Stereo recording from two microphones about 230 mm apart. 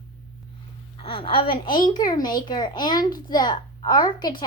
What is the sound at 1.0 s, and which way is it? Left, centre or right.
A child's voice, left.